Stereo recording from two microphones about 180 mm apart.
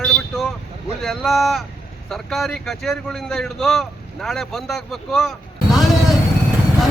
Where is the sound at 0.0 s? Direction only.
5° left (ahead or behind).